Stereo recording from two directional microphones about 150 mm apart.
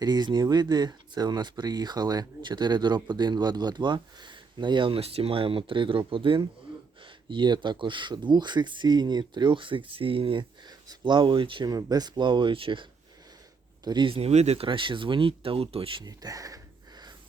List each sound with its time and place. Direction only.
0.0 s speech: 30° right (ahead or behind)